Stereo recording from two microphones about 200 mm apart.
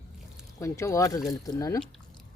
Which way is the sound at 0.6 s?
15° left (ahead or behind).